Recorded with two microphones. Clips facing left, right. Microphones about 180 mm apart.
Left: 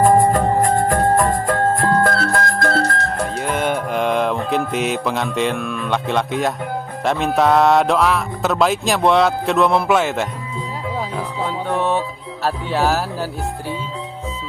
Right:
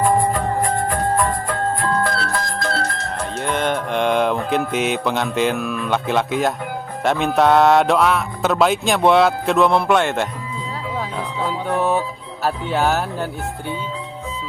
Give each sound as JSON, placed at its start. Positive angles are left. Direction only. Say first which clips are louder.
{"t": 0.0, "sound": "music", "louder": "left 4 dB", "side_deg": 45}
{"t": 3.3, "sound": "mantra", "louder": "right 1 dB", "side_deg": 5}
{"t": 7.0, "sound": "music", "louder": "right 1 dB", "side_deg": 0}
{"t": 11.4, "sound": "speech", "louder": "right 1 dB", "side_deg": -5}